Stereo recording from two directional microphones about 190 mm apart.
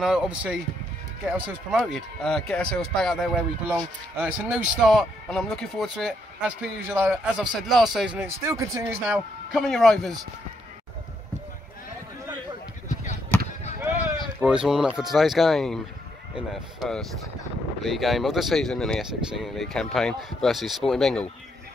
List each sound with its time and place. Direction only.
0.0 s speech: 5° right (ahead or behind)
8.5 s speech: 15° right (ahead or behind)
9.0 s speech: centre (ahead or behind)
13.7 s a sound: 15° right (ahead or behind)
14.4 s speech: 5° right (ahead or behind)